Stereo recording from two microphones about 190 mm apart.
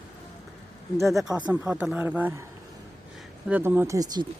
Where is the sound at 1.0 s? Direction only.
Centre (ahead or behind).